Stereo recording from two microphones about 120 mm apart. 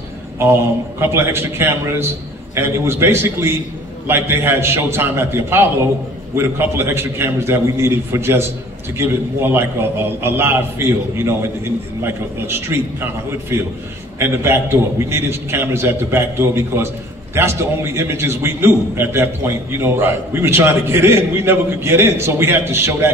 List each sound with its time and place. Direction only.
0.4 s a man's voice: 20° right (ahead or behind)
14.1 s a man's voice: 20° right (ahead or behind)